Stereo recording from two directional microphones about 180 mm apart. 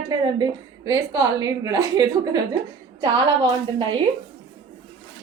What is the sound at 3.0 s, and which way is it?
Speech, 25° right (ahead or behind).